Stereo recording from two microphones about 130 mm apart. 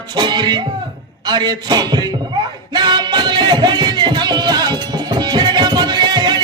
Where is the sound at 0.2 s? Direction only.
35° right (ahead or behind).